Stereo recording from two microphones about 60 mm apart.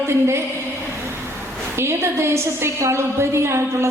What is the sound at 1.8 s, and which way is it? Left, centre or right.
A man's voice, right.